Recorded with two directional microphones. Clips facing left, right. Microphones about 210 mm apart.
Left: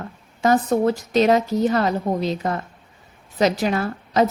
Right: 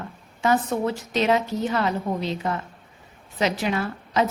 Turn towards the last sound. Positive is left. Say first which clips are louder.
# left 4 dB
turn(degrees=40)  # may be behind; listen again after turning